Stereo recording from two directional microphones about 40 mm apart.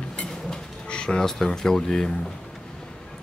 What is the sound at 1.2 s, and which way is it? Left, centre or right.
Speech, centre.